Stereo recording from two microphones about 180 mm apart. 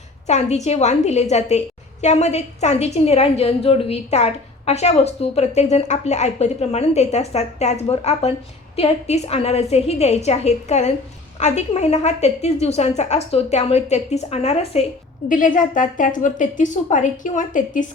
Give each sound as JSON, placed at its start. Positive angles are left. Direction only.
{"t": 0.3, "sound": "a woman's voice", "side_deg": 40}
{"t": 15.3, "sound": "a woman's voice", "side_deg": 45}